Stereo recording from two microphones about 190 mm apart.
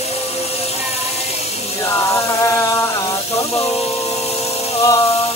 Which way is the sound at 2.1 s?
15° left (ahead or behind).